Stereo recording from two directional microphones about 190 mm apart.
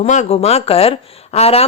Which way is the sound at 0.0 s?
35° left (ahead or behind).